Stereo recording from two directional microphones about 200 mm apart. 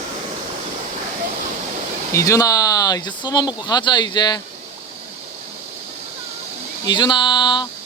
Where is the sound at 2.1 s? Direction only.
15° left (ahead or behind).